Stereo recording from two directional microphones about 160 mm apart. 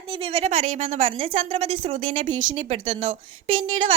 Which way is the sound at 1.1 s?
35° right (ahead or behind).